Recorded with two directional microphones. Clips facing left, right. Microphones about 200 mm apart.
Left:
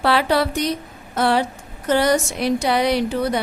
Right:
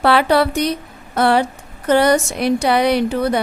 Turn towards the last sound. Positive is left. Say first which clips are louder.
# right 3 dB
turn(degrees=-60)  # may be behind; listen again after turning